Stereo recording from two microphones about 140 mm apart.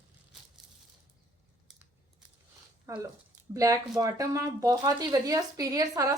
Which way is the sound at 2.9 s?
20° right (ahead or behind).